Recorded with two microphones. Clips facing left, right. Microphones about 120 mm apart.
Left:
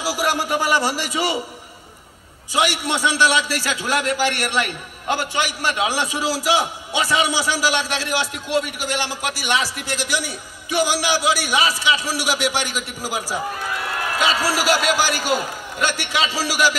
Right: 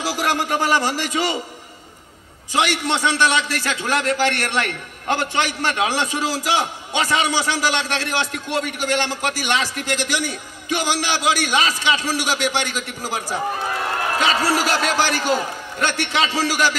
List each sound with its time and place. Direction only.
0.0 s a man's voice: 10° left (ahead or behind)
2.6 s a man's voice: 10° left (ahead or behind)
13.6 s a sound: 35° right (ahead or behind)
14.6 s a man's voice: 10° left (ahead or behind)